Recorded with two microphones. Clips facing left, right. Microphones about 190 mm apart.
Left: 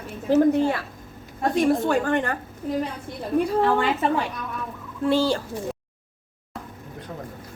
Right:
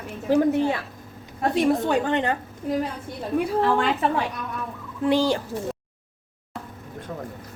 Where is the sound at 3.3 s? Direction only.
Centre (ahead or behind).